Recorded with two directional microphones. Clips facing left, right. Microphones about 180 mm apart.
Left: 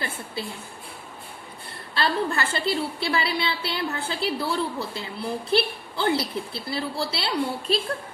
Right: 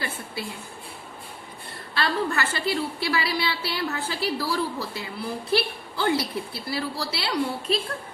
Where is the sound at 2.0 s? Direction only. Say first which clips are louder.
Left 1 dB; 30° left (ahead or behind).